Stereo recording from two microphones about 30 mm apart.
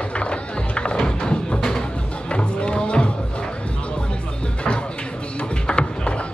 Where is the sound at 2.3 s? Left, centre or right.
Left.